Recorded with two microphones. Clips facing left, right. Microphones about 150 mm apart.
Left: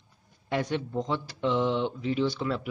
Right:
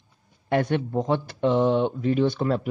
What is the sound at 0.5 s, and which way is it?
Speech, 55° right (ahead or behind).